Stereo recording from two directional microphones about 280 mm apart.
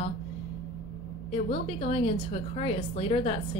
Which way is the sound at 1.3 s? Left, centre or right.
Left.